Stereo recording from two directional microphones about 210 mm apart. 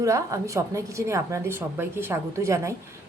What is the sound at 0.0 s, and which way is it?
A woman's voice, 15° right (ahead or behind).